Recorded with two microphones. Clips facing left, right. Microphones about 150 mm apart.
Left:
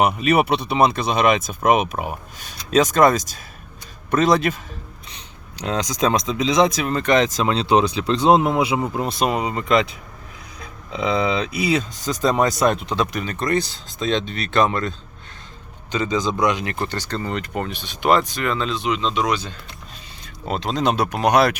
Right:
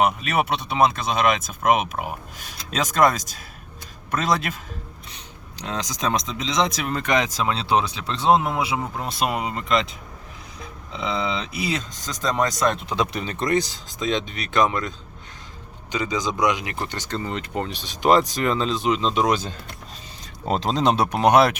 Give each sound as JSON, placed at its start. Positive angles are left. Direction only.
{"t": 0.0, "sound": "speech", "side_deg": 0}
{"t": 5.8, "sound": "speech", "side_deg": 0}
{"t": 11.6, "sound": "speech", "side_deg": 5}
{"t": 13.0, "sound": "speech", "side_deg": -25}
{"t": 17.6, "sound": "speech", "side_deg": -35}
{"t": 20.5, "sound": "speech", "side_deg": -35}